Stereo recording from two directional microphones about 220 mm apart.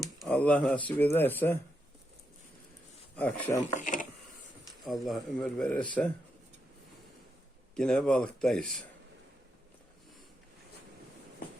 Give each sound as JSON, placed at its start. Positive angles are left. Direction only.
{"t": 0.2, "sound": "speech", "side_deg": 5}
{"t": 3.2, "sound": "speech", "side_deg": 5}
{"t": 3.8, "sound": "speech", "side_deg": 35}
{"t": 4.9, "sound": "a man's voice", "side_deg": 0}
{"t": 7.8, "sound": "a man's voice", "side_deg": 5}